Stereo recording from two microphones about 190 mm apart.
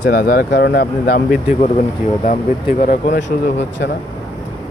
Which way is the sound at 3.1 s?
70° left (ahead or behind).